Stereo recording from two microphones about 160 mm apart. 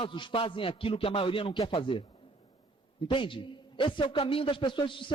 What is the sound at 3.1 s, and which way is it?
A man's voice, 30° left (ahead or behind).